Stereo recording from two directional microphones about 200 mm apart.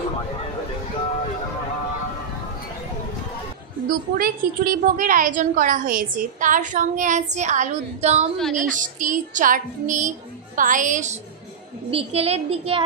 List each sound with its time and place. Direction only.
4.2 s a woman's voice: 45° right (ahead or behind)
8.4 s a woman's voice: centre (ahead or behind)
8.7 s a woman's voice: 40° right (ahead or behind)